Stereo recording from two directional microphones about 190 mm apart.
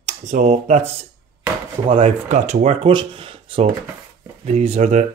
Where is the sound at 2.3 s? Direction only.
40° right (ahead or behind).